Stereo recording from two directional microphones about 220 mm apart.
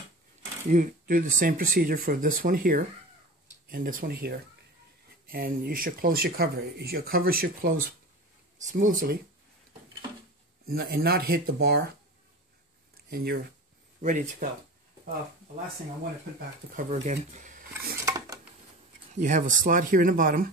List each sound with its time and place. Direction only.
0.7 s speech: 35° right (ahead or behind)
10.7 s speech: 45° right (ahead or behind)
12.9 s a sound: 45° right (ahead or behind)
14.0 s speech: 35° right (ahead or behind)
16.7 s speech: 35° right (ahead or behind)
18.0 s dishes: 15° right (ahead or behind)
19.1 s speech: 35° right (ahead or behind)